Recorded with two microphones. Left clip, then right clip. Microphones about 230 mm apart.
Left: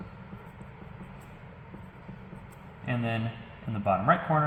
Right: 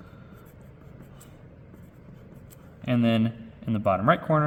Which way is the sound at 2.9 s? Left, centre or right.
Right.